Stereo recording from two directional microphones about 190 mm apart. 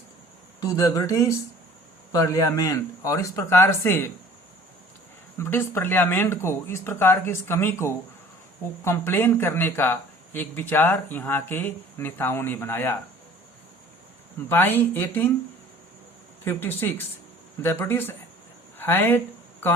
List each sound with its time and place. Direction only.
0.6 s speech: 20° left (ahead or behind)
5.4 s speech: 10° left (ahead or behind)
14.5 s speech: 10° left (ahead or behind)
16.4 s speech: 10° left (ahead or behind)